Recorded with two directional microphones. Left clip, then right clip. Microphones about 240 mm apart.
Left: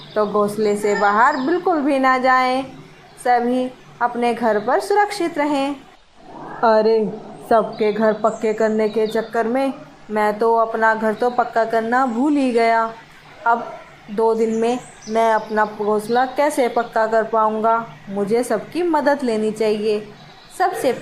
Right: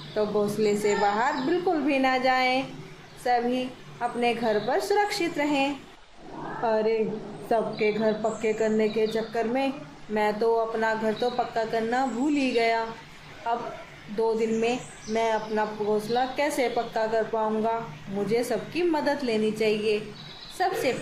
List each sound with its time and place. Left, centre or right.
0.1 s a woman's voice: centre
14.2 s speech: centre